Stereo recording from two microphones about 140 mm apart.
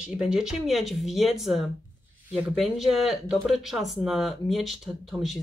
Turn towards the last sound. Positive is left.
turn(degrees=-5)  # may be behind; listen again after turning